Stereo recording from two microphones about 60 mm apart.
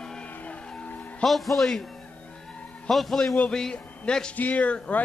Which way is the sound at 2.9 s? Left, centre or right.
Centre.